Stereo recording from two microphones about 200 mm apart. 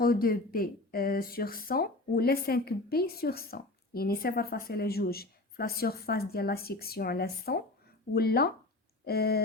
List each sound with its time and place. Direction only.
0.0 s speech: 45° left (ahead or behind)